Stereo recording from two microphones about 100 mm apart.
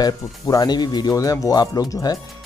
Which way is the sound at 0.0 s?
40° left (ahead or behind).